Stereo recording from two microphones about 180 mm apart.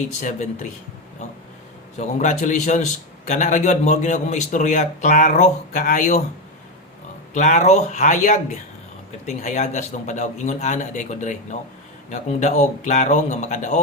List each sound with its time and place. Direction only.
0.2 s a man's voice: 45° left (ahead or behind)
2.0 s a man's voice: 40° left (ahead or behind)
7.3 s a man's voice: 40° left (ahead or behind)